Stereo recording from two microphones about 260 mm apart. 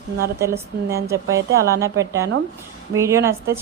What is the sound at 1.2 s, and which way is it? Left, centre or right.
Speech, right.